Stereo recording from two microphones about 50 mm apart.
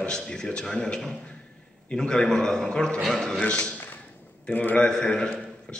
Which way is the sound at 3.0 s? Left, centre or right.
Centre.